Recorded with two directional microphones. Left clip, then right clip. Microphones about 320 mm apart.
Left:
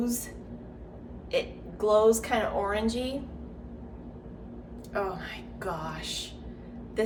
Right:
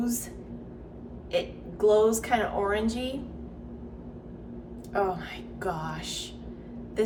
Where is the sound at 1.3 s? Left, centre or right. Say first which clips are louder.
Right 1 dB; centre.